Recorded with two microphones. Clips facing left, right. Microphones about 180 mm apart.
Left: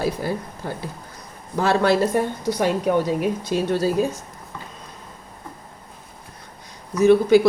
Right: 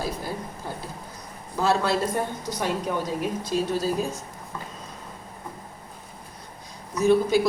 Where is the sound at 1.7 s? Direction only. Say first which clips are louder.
Left 6 dB; 65° left (ahead or behind).